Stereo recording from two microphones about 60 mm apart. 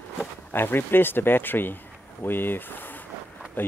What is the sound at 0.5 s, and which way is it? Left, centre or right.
Speech, left.